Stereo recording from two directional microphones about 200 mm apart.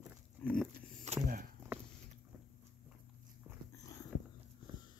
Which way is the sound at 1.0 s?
40° right (ahead or behind).